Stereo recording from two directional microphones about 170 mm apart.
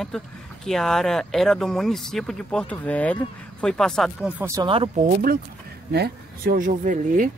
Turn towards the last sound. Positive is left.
turn(degrees=-50)  # may be behind; listen again after turning